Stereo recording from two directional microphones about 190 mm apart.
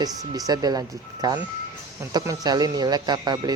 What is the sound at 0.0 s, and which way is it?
A man's voice, 20° right (ahead or behind).